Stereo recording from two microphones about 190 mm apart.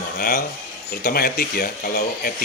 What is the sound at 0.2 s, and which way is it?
Speech, 50° left (ahead or behind).